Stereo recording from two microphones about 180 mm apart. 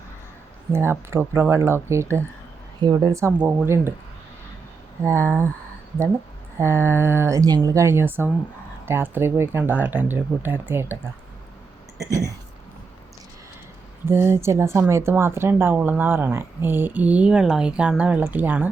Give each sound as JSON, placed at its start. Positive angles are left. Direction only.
{"t": 0.7, "sound": "speech", "side_deg": -15}
{"t": 5.0, "sound": "speech", "side_deg": -15}
{"t": 6.6, "sound": "speech", "side_deg": -15}
{"t": 11.9, "sound": "speech", "side_deg": -20}
{"t": 14.0, "sound": "speech", "side_deg": -15}